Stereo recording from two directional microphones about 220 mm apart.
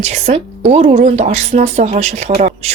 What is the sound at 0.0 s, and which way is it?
A woman's voice, 30° right (ahead or behind).